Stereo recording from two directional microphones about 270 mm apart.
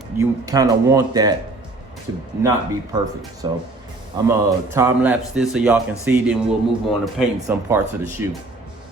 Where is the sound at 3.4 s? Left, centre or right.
Centre.